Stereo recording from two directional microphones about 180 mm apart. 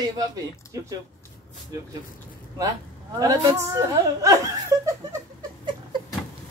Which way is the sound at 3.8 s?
15° right (ahead or behind).